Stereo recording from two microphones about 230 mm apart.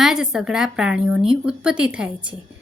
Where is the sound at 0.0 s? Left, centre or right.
Centre.